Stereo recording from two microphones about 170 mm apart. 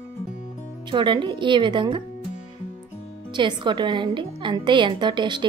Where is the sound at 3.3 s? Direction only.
25° right (ahead or behind).